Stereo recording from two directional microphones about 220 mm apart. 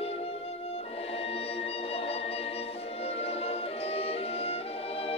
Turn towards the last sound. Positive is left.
turn(degrees=25)  # may be behind; listen again after turning